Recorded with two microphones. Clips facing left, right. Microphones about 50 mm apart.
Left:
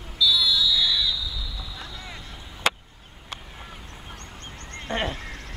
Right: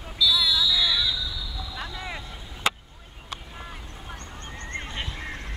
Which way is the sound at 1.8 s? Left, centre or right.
Right.